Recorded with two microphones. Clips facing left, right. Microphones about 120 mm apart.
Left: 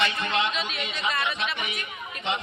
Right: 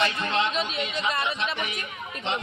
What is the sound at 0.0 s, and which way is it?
Speech, 35° right (ahead or behind).